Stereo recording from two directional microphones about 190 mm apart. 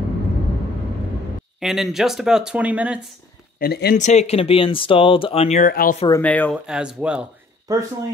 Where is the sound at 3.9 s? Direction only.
35° left (ahead or behind).